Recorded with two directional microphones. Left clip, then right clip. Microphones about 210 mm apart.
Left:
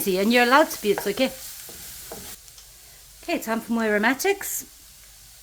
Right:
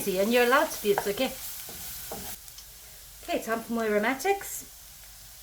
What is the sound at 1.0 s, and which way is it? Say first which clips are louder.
Stir: left 5 dB; 40° left (ahead or behind).